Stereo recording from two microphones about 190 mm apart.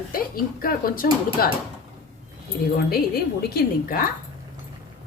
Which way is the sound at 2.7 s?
55° left (ahead or behind).